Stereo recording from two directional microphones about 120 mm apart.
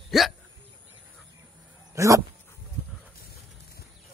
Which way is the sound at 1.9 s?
25° right (ahead or behind).